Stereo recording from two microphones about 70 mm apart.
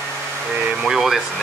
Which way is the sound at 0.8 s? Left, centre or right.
Centre.